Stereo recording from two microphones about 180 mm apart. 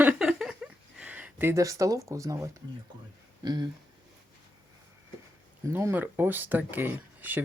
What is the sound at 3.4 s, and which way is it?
Speech, 25° right (ahead or behind).